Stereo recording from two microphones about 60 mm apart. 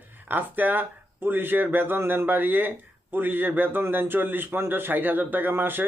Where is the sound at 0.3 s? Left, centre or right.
Right.